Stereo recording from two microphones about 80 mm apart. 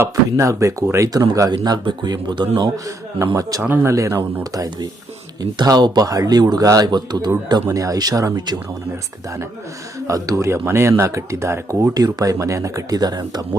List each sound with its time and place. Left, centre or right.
0.3 s speech: right
2.7 s speech: right
3.6 s speech: right
3.9 s speech: right
4.5 s speech: right
6.1 s speech: right
7.7 s speech: right
8.4 s speech: right
10.1 s speech: right